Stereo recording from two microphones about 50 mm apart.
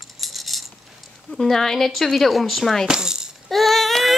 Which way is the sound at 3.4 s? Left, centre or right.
Centre.